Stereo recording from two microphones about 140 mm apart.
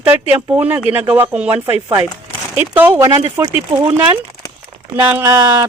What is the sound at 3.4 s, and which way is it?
Speech, 20° right (ahead or behind).